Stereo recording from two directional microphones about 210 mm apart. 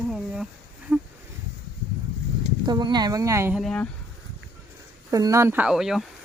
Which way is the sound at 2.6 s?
20° right (ahead or behind).